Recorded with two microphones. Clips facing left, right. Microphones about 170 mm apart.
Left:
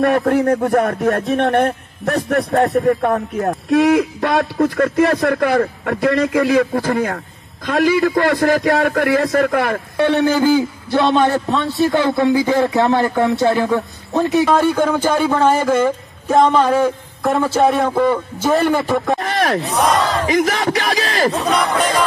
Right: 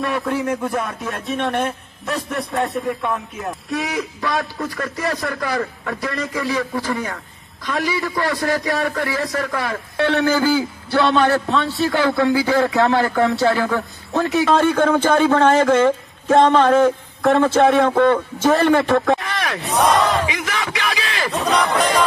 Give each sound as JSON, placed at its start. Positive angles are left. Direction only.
{"t": 0.1, "sound": "a man's voice", "side_deg": 55}
{"t": 0.8, "sound": "a man's voice", "side_deg": 65}
{"t": 10.4, "sound": "a man's voice", "side_deg": 20}
{"t": 14.2, "sound": "speech", "side_deg": 0}
{"t": 19.1, "sound": "a sound", "side_deg": 45}
{"t": 19.6, "sound": "battle cry", "side_deg": 0}
{"t": 20.2, "sound": "a sound", "side_deg": 40}
{"t": 21.3, "sound": "speech", "side_deg": 0}